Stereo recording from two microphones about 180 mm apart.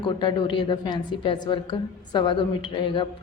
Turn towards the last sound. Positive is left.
turn(degrees=25)  # may be behind; listen again after turning